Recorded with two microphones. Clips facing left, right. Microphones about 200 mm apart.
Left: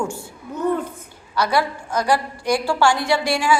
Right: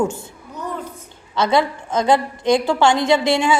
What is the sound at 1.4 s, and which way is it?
A woman's voice, 20° right (ahead or behind).